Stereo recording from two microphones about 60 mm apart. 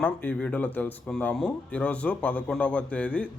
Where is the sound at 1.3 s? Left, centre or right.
Centre.